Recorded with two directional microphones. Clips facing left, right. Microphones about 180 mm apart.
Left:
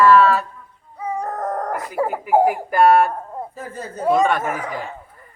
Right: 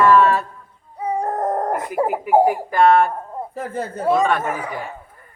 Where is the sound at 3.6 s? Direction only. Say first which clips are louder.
Right 5 dB; 60° right (ahead or behind).